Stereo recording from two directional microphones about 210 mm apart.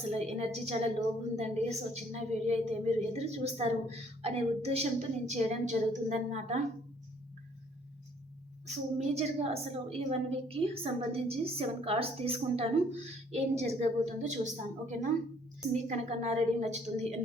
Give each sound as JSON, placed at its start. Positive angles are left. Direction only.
{"t": 0.1, "sound": "a woman's voice", "side_deg": -30}
{"t": 8.6, "sound": "a woman's voice", "side_deg": -30}